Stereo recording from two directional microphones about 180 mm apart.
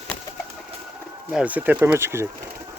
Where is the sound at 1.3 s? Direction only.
10° right (ahead or behind).